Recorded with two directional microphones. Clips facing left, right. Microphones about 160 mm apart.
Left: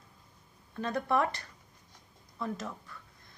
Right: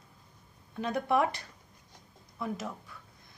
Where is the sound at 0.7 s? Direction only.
10° right (ahead or behind).